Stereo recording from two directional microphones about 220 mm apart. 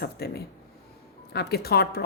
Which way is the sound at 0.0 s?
45° left (ahead or behind).